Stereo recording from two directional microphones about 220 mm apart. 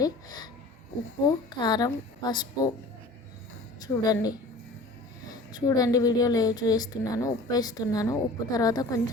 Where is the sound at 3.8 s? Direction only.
20° left (ahead or behind).